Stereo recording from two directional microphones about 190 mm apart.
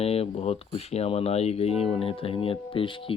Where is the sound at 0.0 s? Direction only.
30° left (ahead or behind).